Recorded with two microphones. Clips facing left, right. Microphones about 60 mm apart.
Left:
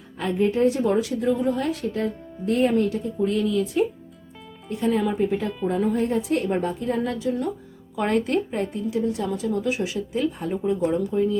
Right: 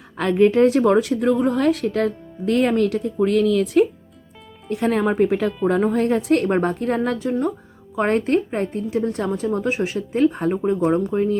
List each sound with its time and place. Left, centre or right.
0.2 s a woman's voice: right
4.7 s a woman's voice: right